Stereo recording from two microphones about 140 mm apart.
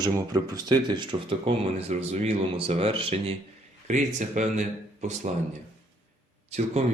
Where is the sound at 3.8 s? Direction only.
65° right (ahead or behind).